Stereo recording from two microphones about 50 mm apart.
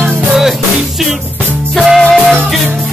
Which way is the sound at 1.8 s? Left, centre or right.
Centre.